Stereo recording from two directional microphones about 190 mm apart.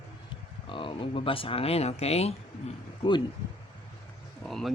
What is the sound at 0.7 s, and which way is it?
Speech, 25° left (ahead or behind).